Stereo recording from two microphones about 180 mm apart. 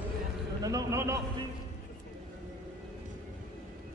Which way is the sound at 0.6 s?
20° right (ahead or behind).